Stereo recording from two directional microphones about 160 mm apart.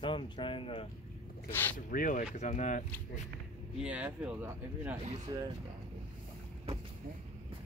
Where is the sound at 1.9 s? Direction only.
55° left (ahead or behind).